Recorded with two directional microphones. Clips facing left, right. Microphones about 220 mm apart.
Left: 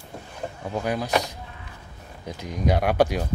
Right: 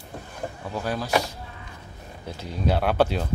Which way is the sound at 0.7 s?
15° left (ahead or behind).